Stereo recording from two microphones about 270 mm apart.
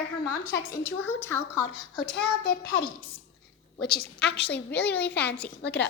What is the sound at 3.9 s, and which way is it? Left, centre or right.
A woman's voice, left.